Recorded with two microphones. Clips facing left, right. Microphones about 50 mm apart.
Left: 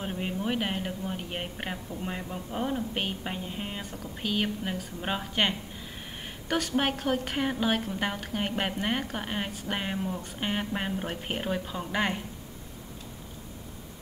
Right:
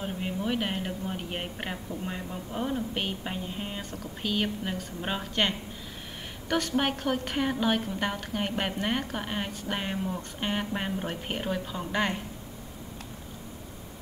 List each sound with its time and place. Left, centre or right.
0.0 s a woman's voice: centre